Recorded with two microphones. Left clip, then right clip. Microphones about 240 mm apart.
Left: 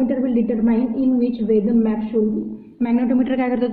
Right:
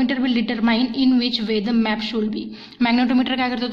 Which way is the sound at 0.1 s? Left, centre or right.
Right.